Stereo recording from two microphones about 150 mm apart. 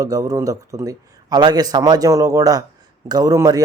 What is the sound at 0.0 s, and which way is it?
Speech, 25° right (ahead or behind).